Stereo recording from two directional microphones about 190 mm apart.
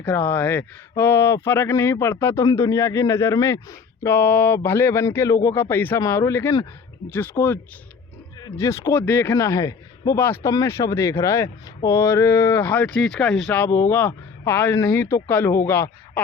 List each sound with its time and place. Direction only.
0.0 s speech: 10° left (ahead or behind)